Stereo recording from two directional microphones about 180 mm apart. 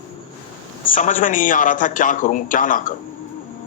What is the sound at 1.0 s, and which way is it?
A man's voice, 45° left (ahead or behind).